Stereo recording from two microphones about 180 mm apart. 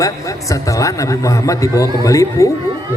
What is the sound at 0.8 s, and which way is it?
Speech, 20° left (ahead or behind).